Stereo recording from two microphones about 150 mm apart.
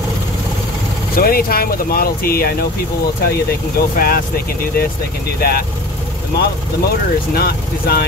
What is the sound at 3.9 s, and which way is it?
Speech, 85° left.